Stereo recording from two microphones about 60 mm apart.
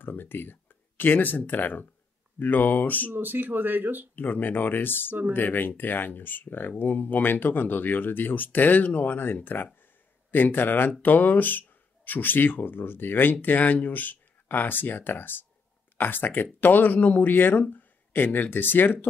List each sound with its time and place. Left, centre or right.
0.0 s speech: left
3.1 s speech: right
4.1 s speech: left